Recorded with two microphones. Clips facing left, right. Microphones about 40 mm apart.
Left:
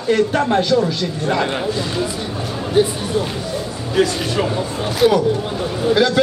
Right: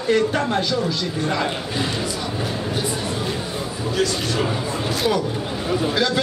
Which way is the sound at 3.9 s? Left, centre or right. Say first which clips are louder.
Left 5 dB; centre.